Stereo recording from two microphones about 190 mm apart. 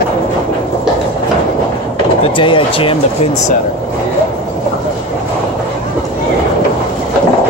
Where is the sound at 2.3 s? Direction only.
25° left (ahead or behind).